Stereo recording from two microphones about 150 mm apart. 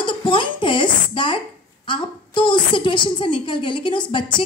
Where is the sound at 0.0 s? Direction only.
35° left (ahead or behind).